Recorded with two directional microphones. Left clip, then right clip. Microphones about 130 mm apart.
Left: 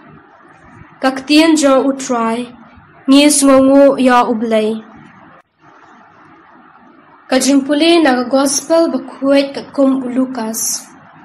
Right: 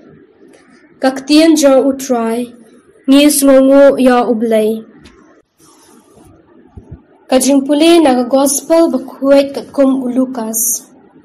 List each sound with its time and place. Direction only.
0.9 s a woman's voice: 25° right (ahead or behind)
3.1 s a woman's voice: 5° right (ahead or behind)
7.2 s a woman's voice: 30° right (ahead or behind)